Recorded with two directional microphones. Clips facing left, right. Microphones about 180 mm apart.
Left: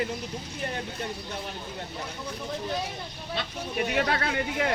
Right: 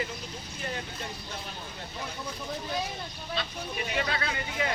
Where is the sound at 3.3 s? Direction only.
60° left (ahead or behind).